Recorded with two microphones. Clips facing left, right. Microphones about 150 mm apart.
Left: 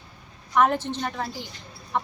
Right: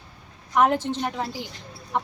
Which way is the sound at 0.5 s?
10° right (ahead or behind).